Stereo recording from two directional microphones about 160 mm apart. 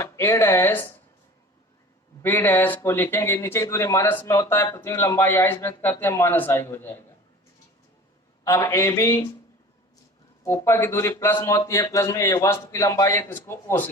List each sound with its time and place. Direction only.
0.0 s speech: 15° left (ahead or behind)
2.2 s speech: 10° left (ahead or behind)
8.4 s speech: 20° left (ahead or behind)
10.4 s speech: 20° left (ahead or behind)